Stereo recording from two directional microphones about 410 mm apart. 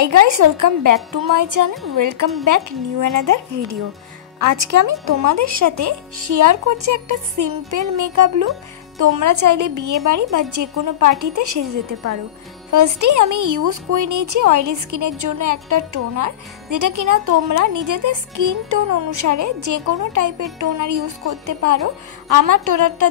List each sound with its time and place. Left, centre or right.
0.0 s speech: right